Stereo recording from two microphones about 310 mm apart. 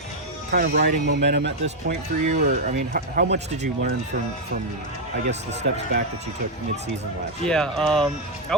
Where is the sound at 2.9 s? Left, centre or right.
Right.